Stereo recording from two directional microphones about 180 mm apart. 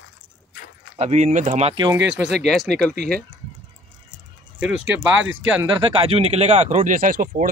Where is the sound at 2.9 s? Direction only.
65° right (ahead or behind).